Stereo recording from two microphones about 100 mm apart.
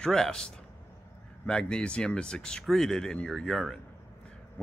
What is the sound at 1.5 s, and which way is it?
Speech, 10° left (ahead or behind).